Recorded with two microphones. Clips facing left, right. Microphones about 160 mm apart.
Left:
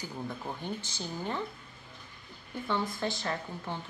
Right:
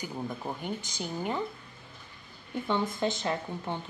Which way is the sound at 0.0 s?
15° right (ahead or behind).